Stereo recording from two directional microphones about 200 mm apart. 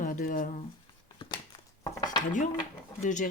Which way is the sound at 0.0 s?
45° left (ahead or behind).